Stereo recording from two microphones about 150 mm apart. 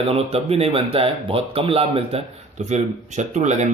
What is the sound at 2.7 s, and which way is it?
Speech, 50° right (ahead or behind).